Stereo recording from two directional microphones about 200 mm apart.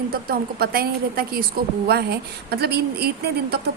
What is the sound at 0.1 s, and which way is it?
A woman's voice, 50° right (ahead or behind).